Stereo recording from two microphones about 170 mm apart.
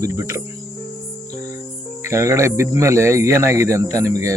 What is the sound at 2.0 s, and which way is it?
Speech, 15° right (ahead or behind).